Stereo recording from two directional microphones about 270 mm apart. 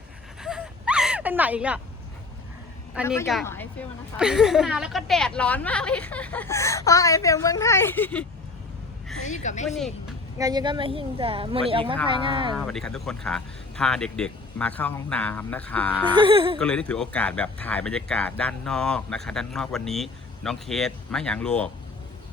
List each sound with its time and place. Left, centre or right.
0.4 s a sound: centre
2.9 s a woman's voice: centre
9.3 s a woman's voice: left
9.6 s speech: centre
10.3 s a woman's voice: centre
12.5 s speech: centre
16.1 s a woman's voice: centre
16.6 s speech: centre